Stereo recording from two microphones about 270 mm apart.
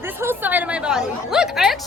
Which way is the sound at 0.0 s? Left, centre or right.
Centre.